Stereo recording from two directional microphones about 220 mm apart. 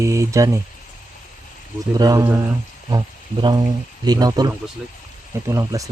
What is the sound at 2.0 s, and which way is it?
Speech, 15° right (ahead or behind).